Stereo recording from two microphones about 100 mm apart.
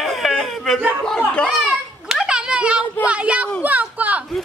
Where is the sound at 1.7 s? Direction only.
5° right (ahead or behind).